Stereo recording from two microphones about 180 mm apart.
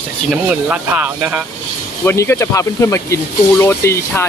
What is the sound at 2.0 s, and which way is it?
Speech, 15° left (ahead or behind).